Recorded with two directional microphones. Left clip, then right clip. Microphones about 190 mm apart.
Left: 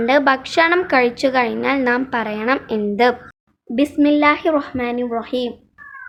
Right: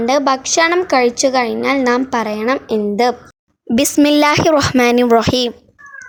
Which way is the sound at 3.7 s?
65° right (ahead or behind).